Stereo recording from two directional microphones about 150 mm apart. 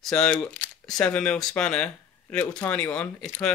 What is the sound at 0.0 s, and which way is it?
Speech, 5° left (ahead or behind).